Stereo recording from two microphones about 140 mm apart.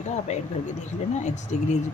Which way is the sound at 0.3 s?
55° left (ahead or behind).